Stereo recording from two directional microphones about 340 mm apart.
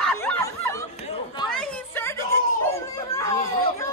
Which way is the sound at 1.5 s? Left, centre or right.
Centre.